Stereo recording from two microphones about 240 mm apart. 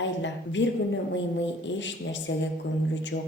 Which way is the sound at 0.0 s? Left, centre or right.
Left.